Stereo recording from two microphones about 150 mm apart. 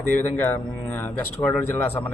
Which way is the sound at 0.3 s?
10° left (ahead or behind).